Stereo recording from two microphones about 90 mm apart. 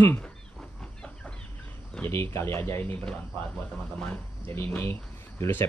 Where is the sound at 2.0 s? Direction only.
30° left (ahead or behind).